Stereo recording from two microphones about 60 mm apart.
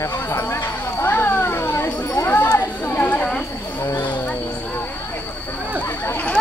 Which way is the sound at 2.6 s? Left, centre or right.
Left.